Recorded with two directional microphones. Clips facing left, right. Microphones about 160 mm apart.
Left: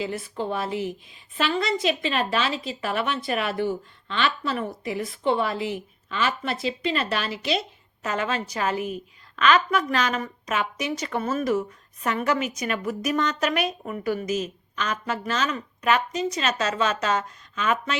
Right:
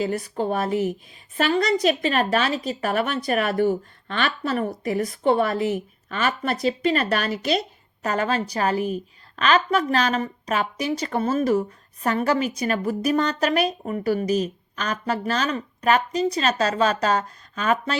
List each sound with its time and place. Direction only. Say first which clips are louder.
0.0 s a woman's voice: right 4 dB; 45° right (ahead or behind)